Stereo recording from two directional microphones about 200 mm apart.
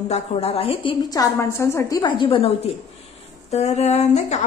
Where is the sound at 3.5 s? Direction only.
35° left (ahead or behind).